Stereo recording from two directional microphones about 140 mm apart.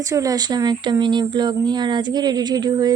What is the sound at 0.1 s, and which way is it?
A woman's voice, 25° right (ahead or behind).